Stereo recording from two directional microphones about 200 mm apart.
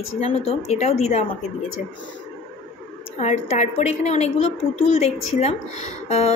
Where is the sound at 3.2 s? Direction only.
35° left (ahead or behind).